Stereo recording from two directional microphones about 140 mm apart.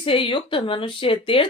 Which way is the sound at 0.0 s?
40° left (ahead or behind).